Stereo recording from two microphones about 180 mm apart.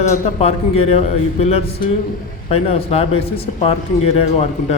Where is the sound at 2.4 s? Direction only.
35° left (ahead or behind).